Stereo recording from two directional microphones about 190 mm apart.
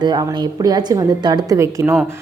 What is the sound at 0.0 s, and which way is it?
A woman's voice, 20° right (ahead or behind).